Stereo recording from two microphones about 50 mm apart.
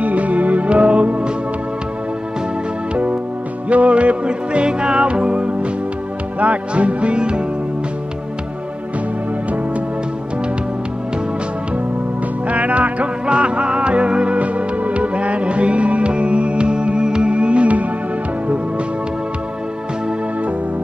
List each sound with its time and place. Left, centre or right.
0.0 s music: right
2.9 s music: right
12.4 s music: right